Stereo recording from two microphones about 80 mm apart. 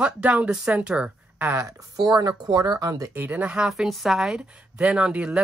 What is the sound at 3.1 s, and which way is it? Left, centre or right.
Speech, right.